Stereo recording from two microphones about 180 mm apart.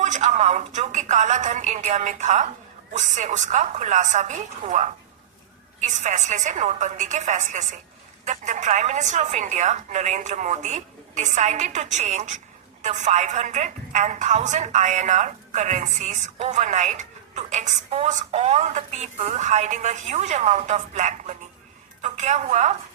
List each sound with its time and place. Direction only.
0.0 s a woman's voice: 40° right (ahead or behind)